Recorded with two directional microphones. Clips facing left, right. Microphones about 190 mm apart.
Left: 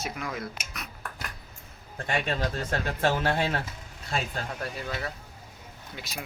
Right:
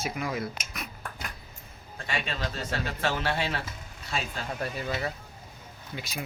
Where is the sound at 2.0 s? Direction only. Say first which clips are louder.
Left 4 dB; 50° left (ahead or behind).